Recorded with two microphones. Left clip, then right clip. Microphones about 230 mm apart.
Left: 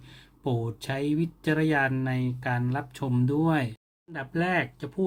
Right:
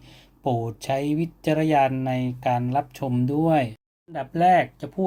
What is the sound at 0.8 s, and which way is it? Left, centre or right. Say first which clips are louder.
Speech: right 4 dB; left.